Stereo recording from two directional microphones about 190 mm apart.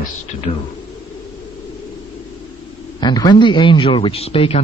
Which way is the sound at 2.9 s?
20° left (ahead or behind).